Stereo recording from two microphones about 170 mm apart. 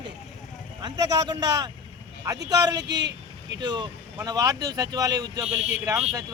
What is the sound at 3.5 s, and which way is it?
A man's voice, 25° right (ahead or behind).